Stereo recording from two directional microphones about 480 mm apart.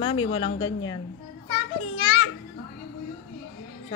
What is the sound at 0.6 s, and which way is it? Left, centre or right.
Speech, left.